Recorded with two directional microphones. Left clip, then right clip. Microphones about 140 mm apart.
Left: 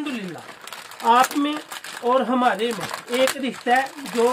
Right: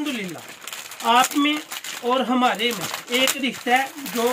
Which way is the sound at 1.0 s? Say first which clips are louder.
Left 1 dB; 25° left (ahead or behind).